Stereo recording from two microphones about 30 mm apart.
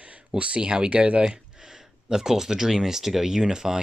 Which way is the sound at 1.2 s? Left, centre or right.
Right.